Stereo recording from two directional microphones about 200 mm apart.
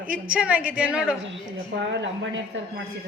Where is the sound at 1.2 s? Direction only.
65° right (ahead or behind).